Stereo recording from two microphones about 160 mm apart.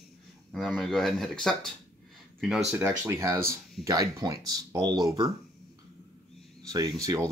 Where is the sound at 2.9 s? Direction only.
20° right (ahead or behind).